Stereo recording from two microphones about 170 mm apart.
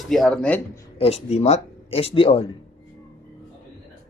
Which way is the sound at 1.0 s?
40° left (ahead or behind).